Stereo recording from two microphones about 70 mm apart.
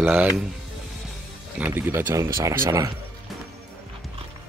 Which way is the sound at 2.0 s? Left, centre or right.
Right.